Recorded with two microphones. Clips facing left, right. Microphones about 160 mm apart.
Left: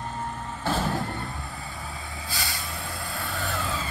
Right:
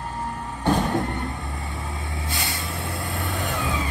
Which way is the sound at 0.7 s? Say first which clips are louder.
Right 5 dB; 20° right (ahead or behind).